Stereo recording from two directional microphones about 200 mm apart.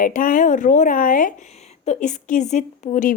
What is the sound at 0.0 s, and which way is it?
Speech, 40° left (ahead or behind).